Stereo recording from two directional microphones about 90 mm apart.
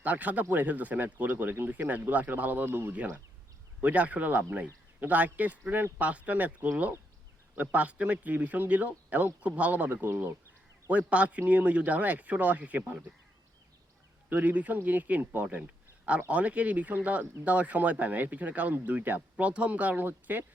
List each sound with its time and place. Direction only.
0.0 s speech: 15° right (ahead or behind)
14.3 s speech: 20° right (ahead or behind)